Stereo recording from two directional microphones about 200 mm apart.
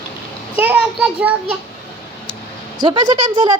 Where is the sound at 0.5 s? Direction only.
5° right (ahead or behind).